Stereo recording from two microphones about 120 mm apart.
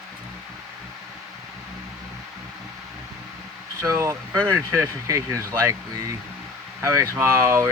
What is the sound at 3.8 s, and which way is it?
Speech, 20° right (ahead or behind).